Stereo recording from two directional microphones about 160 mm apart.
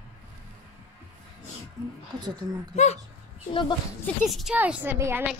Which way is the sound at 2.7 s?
45° left (ahead or behind).